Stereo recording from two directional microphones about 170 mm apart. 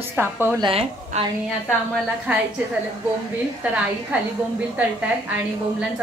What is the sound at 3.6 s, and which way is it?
Speech, 5° right (ahead or behind).